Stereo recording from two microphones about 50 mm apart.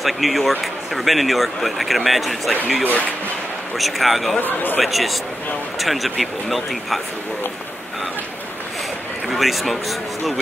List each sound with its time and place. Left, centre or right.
0.0 s a man's voice: centre
3.7 s a man's voice: centre
4.4 s speech: left
4.7 s a man's voice: centre
9.3 s a man's voice: centre